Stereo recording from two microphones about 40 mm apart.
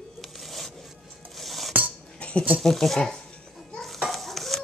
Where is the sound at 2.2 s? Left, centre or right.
Left.